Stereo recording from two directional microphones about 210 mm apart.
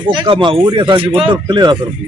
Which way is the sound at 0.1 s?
25° right (ahead or behind).